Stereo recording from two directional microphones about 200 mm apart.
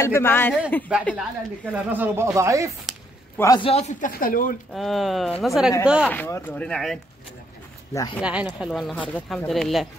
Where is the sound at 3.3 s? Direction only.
20° left (ahead or behind); by 4.5 s 45° left (ahead or behind).